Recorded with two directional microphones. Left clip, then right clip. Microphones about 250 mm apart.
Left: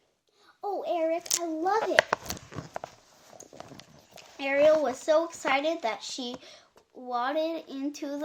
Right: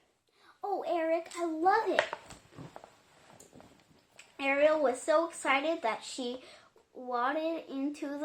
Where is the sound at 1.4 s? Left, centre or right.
Left.